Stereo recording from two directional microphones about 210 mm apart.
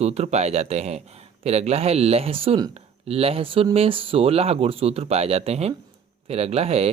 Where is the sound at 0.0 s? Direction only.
30° right (ahead or behind).